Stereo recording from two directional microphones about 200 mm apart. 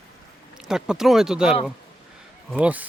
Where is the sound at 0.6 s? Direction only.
Centre (ahead or behind).